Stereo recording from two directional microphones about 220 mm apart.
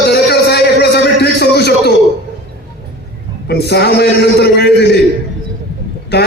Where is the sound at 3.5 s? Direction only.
45° left (ahead or behind).